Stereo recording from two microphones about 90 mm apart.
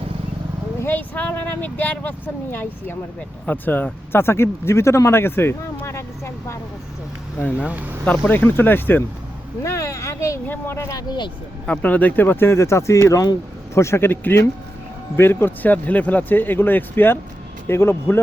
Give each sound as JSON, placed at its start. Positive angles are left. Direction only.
{"t": 0.8, "sound": "speech", "side_deg": 20}
{"t": 7.3, "sound": "speech", "side_deg": 15}
{"t": 9.6, "sound": "a sound", "side_deg": 35}
{"t": 10.4, "sound": "speech", "side_deg": 25}
{"t": 11.6, "sound": "speech", "side_deg": 15}